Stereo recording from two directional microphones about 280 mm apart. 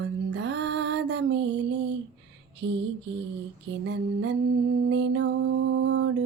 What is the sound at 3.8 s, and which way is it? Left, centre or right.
Female singing, right.